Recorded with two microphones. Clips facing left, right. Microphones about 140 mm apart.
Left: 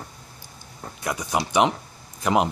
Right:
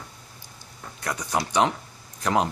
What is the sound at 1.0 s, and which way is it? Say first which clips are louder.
Speech: left 1 dB; 10° left (ahead or behind).